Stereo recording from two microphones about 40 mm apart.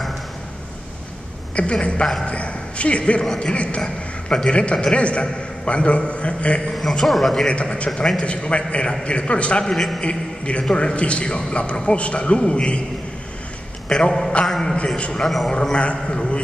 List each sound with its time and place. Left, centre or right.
1.5 s a woman's voice: left
6.7 s a man's voice: centre
7.7 s a man's voice: left
13.8 s a man's voice: centre
14.4 s a man's voice: centre
15.0 s a man's voice: left
15.2 s a man's voice: centre
15.8 s a man's voice: left